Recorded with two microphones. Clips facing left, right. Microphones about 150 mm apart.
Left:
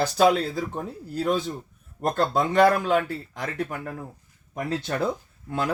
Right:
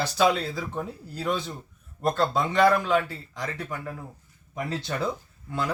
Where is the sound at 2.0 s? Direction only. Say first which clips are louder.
Left 1 dB; 45° left (ahead or behind).